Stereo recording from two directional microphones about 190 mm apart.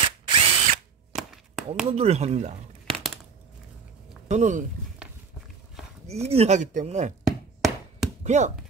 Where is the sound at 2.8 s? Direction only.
Centre (ahead or behind).